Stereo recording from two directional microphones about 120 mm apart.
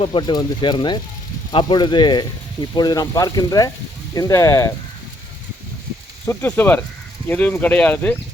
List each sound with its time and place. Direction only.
0.0 s speech: 45° left (ahead or behind); by 4.7 s 25° left (ahead or behind)
6.2 s speech: 15° left (ahead or behind)